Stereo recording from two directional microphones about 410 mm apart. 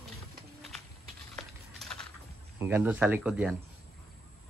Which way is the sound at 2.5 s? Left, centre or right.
Centre.